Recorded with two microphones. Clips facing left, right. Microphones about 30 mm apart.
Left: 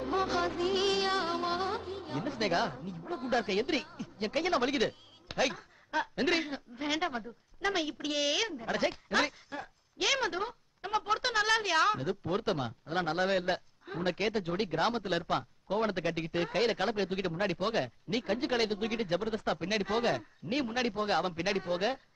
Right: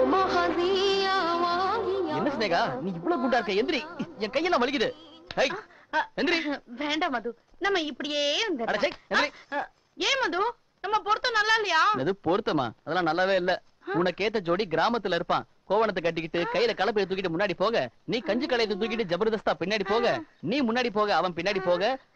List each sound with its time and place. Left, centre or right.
0.1 s music of bollywood: right
0.6 s music: centre
1.8 s music: right
2.4 s a woman's voice: centre
2.7 s a woman's voice: right
3.3 s speech: centre
3.8 s speech: right
4.2 s a woman's voice: centre
9.5 s a woman's voice: right
9.9 s a woman's voice: centre